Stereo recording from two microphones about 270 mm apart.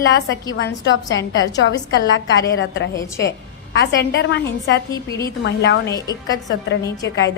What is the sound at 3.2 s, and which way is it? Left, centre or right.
A woman's voice, left.